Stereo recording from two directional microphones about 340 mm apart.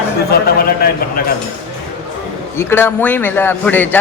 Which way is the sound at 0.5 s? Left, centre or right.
Left.